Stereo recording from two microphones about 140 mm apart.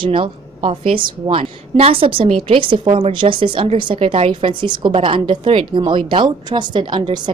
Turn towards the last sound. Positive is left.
turn(degrees=-35)  # may be behind; listen again after turning